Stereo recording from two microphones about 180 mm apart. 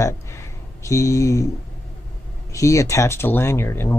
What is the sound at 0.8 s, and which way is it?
Speech, 15° left (ahead or behind).